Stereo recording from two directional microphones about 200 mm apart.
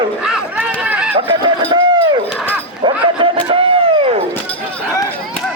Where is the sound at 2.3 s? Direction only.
5° left (ahead or behind).